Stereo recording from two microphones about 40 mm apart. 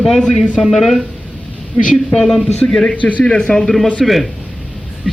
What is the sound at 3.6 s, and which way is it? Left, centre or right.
Speech, centre.